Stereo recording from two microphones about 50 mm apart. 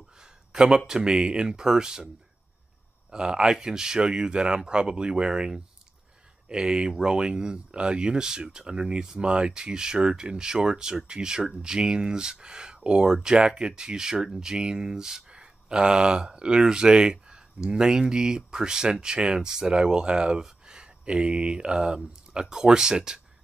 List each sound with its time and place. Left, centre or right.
0.5 s speech: centre
3.1 s speech: centre
6.5 s speech: centre